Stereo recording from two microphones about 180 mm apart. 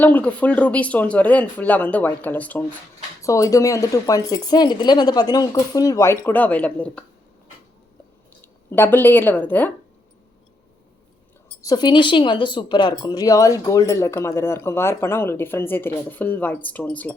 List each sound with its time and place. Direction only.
0.0 s speech: 10° left (ahead or behind)
8.7 s speech: 10° left (ahead or behind)
11.6 s speech: 20° left (ahead or behind)